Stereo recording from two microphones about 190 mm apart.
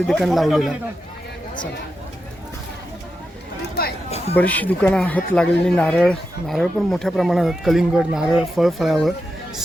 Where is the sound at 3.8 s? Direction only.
55° left (ahead or behind).